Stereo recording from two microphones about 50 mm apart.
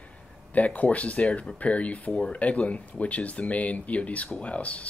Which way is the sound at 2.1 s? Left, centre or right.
Centre.